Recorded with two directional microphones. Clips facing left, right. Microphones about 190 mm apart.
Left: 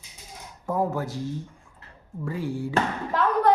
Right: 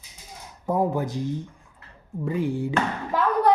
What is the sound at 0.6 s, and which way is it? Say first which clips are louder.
Speech: right 3 dB; 20° right (ahead or behind).